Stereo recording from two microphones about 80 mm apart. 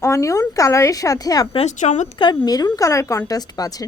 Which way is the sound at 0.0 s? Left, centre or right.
Left.